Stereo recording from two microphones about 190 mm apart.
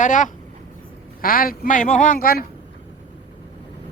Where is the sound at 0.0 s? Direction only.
40° left (ahead or behind).